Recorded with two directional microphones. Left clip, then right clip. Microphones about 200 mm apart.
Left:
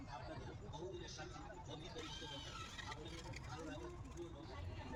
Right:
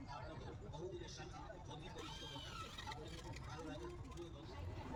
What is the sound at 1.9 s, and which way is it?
Vehicle, 35° right (ahead or behind).